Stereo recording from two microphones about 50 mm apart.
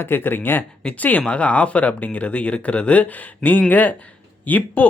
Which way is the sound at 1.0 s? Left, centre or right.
Left.